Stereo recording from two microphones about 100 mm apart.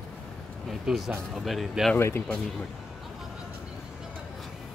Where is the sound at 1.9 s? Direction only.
25° left (ahead or behind).